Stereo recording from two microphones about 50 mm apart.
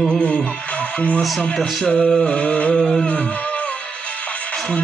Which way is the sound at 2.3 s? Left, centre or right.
Left.